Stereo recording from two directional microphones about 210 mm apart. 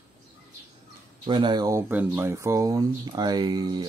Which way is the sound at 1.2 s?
20° right (ahead or behind).